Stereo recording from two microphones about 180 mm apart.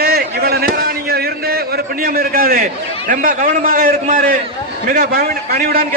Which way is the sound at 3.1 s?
50° right (ahead or behind).